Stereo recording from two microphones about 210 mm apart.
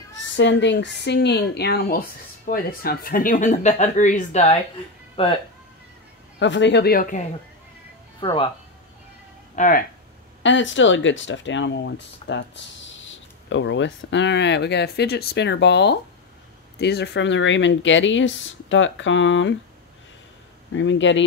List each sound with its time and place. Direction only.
0.4 s speech: 55° left (ahead or behind); by 5.3 s 25° left (ahead or behind)
6.4 s speech: 60° left (ahead or behind); by 7.2 s 40° left (ahead or behind)
8.2 s speech: 25° left (ahead or behind)
9.6 s speech: 40° left (ahead or behind)
10.4 s speech: 60° left (ahead or behind)
20.7 s speech: 60° left (ahead or behind)